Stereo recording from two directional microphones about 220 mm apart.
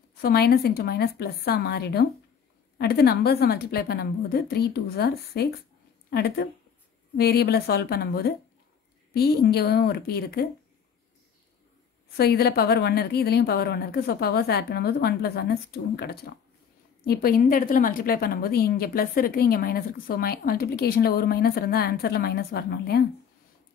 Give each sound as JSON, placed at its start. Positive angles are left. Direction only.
{"t": 0.2, "sound": "a woman's voice", "side_deg": 45}
{"t": 12.2, "sound": "a woman's voice", "side_deg": 45}